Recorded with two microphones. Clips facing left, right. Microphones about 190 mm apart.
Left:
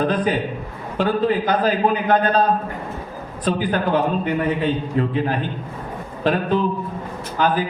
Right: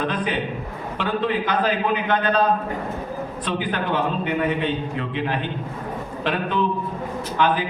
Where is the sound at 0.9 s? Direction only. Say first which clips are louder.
Left 5 dB; 40° left (ahead or behind).